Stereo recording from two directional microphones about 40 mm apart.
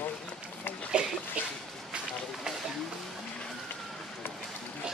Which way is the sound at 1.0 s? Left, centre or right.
Right.